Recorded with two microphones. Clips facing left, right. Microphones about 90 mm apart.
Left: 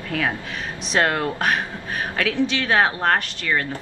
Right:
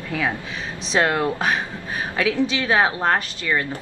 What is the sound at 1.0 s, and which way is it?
A woman's voice, 15° right (ahead or behind).